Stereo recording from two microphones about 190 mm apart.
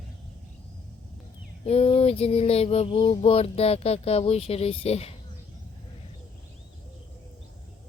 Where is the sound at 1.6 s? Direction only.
30° left (ahead or behind).